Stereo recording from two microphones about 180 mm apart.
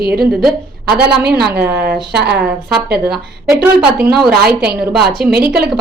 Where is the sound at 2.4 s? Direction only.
5° right (ahead or behind).